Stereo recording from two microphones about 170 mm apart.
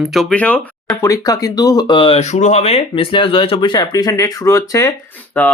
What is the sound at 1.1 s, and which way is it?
Speech, 20° left (ahead or behind).